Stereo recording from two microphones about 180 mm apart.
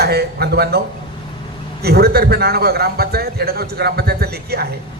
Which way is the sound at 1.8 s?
60° right (ahead or behind).